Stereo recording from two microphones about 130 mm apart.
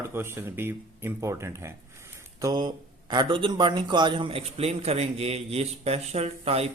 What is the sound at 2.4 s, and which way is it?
Speech, 30° right (ahead or behind).